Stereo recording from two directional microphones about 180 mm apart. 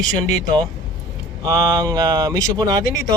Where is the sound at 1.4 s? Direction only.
20° right (ahead or behind).